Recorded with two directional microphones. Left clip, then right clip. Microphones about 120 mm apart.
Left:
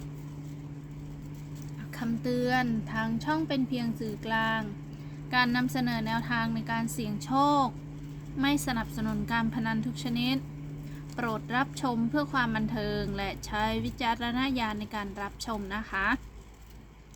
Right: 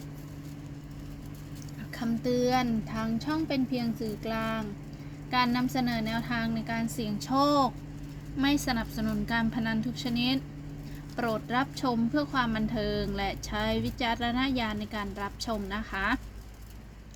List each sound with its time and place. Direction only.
2.0 s a woman's voice: 20° left (ahead or behind)